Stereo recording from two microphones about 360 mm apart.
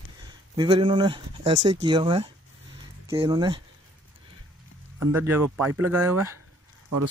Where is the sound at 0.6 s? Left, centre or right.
Centre.